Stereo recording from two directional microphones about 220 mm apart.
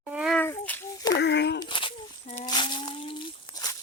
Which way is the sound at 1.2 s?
50° left (ahead or behind).